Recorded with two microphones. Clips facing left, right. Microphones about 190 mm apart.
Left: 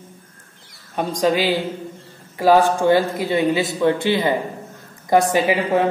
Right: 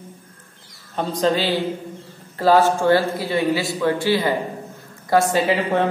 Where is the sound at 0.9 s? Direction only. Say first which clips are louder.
Left 1 dB; 10° left (ahead or behind).